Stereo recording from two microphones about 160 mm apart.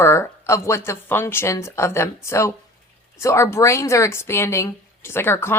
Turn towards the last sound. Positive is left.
turn(degrees=15)  # may be behind; listen again after turning